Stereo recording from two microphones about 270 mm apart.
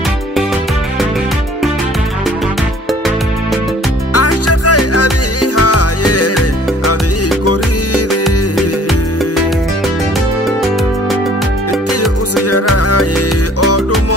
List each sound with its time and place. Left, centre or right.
4.1 s music: left
12.0 s music: left